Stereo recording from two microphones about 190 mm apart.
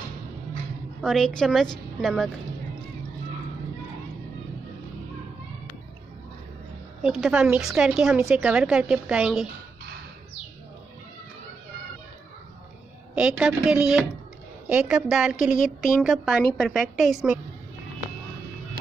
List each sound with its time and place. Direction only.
1.0 s a woman's voice: centre (ahead or behind)
7.0 s a woman's voice: centre (ahead or behind)
13.1 s a woman's voice: 5° right (ahead or behind)
15.5 s a woman's voice: 45° left (ahead or behind)
15.9 s a woman's voice: centre (ahead or behind)